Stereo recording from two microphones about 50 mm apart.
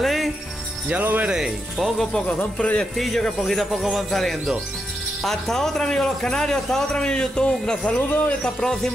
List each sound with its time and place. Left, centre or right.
0.0 s music: centre
1.8 s speech: centre
2.1 s speech: centre
3.0 s speech: centre
5.2 s a man's voice: centre
8.1 s speech: left
8.5 s a man's voice: centre